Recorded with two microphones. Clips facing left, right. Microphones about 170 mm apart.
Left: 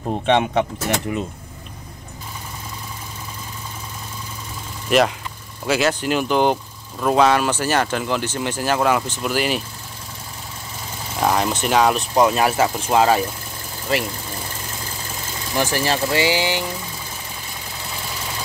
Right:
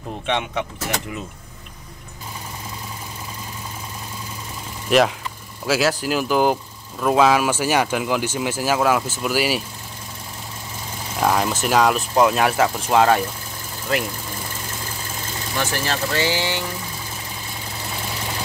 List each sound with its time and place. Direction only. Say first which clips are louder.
0.1 s speech: left 7 dB; 40° left (ahead or behind)
4.8 s speech: even; centre (ahead or behind)
11.1 s speech: even; centre (ahead or behind)
15.6 s speech: left 4 dB; 15° left (ahead or behind)